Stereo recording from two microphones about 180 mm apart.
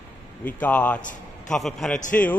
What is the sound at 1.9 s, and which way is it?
Speech, 45° left (ahead or behind).